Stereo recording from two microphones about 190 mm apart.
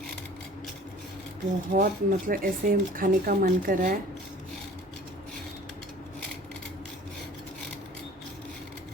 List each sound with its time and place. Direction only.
1.7 s speech: 45° right (ahead or behind)